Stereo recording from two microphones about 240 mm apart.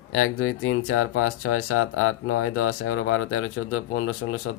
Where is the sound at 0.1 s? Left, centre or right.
Left.